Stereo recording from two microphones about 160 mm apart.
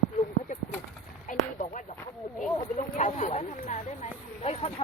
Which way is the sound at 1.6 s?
50° left (ahead or behind).